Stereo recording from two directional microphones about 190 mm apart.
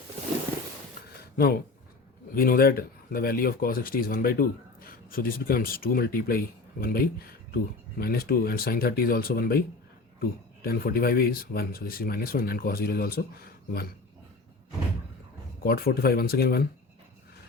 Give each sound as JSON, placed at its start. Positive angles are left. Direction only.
{"t": 1.4, "sound": "speech", "side_deg": 55}
{"t": 15.6, "sound": "speech", "side_deg": 50}